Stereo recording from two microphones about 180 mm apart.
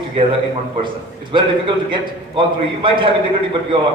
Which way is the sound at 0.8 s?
25° right (ahead or behind).